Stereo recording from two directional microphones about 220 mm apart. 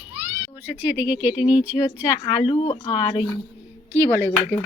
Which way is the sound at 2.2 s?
25° left (ahead or behind).